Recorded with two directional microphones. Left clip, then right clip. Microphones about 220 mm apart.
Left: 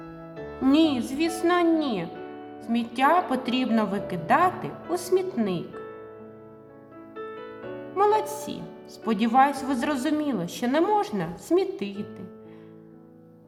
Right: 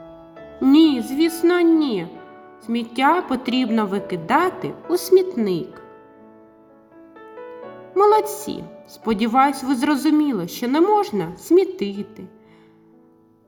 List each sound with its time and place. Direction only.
0.6 s a woman's voice: 20° right (ahead or behind)
7.9 s a woman's voice: 25° right (ahead or behind)